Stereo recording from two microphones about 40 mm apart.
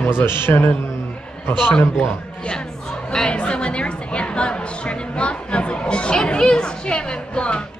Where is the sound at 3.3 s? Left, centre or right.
Left.